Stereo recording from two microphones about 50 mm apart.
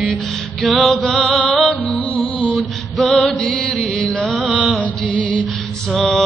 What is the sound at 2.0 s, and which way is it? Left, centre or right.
Music, left.